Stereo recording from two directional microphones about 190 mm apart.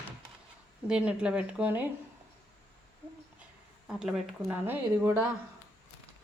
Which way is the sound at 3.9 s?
5° right (ahead or behind).